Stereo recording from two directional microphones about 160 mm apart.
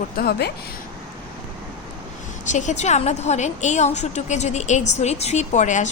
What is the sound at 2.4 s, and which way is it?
A woman's voice, 50° left (ahead or behind).